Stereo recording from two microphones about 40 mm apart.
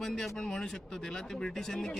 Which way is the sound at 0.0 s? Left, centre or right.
Centre.